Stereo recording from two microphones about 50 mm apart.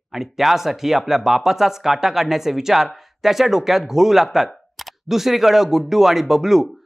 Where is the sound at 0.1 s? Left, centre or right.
Centre.